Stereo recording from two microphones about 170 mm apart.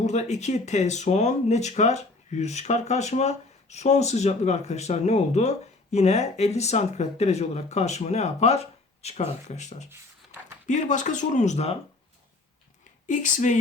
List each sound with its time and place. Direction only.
0.0 s speech: 45° left (ahead or behind)
13.1 s speech: 50° left (ahead or behind)